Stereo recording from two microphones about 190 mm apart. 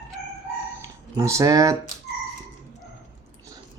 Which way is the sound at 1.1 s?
15° right (ahead or behind).